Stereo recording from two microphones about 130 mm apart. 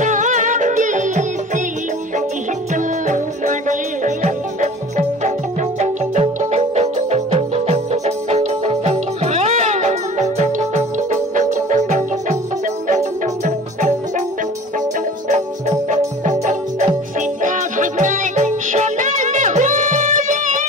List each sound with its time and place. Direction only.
0.0 s music: 70° right (ahead or behind)
2.7 s music: 75° right (ahead or behind)
13.7 s music: 65° right (ahead or behind)
15.2 s music: 60° right (ahead or behind)